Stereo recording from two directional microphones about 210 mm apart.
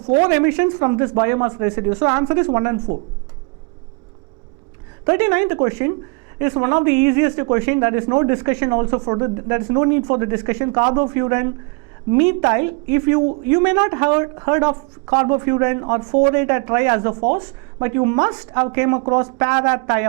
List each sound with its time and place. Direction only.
0.3 s speech: 10° right (ahead or behind)
5.0 s speech: 15° right (ahead or behind)